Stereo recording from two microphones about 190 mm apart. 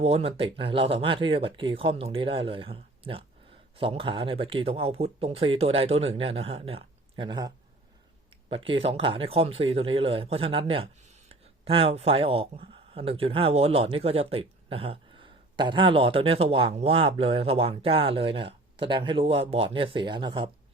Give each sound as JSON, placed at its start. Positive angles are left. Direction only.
{"t": 0.0, "sound": "speech", "side_deg": -30}